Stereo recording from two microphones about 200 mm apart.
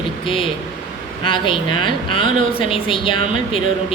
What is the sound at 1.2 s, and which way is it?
Speech, 25° left (ahead or behind).